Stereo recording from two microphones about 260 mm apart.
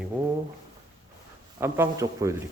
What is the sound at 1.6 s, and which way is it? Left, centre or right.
Speech, centre.